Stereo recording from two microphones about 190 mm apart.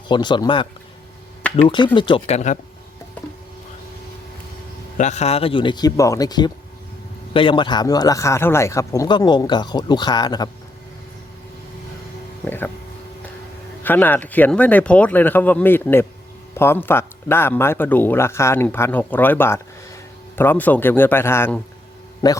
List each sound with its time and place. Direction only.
0.1 s speech: 25° left (ahead or behind)
4.9 s speech: 35° left (ahead or behind); by 10.5 s 20° left (ahead or behind)
12.5 s speech: 10° left (ahead or behind)
13.8 s speech: 10° left (ahead or behind)